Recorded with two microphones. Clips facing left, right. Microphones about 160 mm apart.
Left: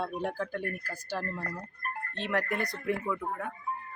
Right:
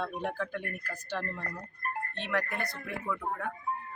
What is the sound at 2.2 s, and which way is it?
Speech, 35° left (ahead or behind).